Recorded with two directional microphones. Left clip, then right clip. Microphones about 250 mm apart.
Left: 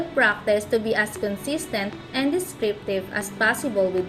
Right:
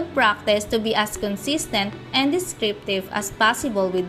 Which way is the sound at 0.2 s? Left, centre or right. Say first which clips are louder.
Right 1 dB; right.